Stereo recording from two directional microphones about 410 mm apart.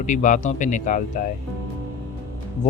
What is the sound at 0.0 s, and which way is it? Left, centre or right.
Speech, centre.